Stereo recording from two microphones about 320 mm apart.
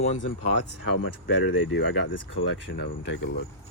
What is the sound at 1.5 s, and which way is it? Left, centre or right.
Speech, left.